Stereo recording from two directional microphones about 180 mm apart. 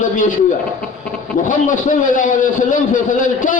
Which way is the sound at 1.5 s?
45° left (ahead or behind).